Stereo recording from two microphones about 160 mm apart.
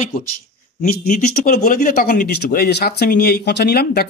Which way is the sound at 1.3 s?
65° left (ahead or behind).